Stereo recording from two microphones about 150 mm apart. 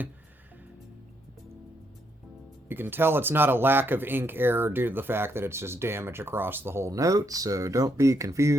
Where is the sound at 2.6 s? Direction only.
15° right (ahead or behind).